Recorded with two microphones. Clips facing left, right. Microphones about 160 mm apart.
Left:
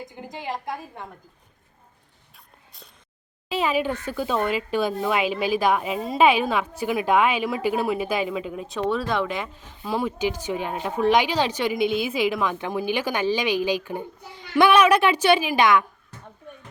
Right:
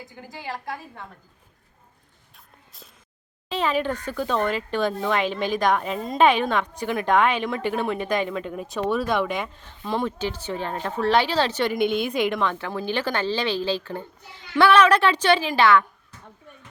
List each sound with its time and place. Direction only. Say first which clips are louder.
0.0 s a woman's voice: left 3 dB; 20° left (ahead or behind)
2.3 s a sound: even; centre (ahead or behind)
3.5 s a woman's voice: left 1 dB; 10° left (ahead or behind)
12.5 s speech: left 2 dB; 15° left (ahead or behind)